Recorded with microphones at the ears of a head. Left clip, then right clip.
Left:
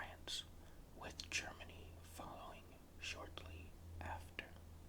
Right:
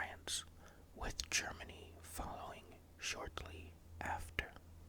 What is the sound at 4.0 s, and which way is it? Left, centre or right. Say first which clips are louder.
Whispering: right 8 dB; right.